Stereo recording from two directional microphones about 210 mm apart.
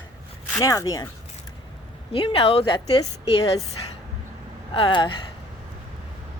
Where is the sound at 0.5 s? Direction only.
15° left (ahead or behind).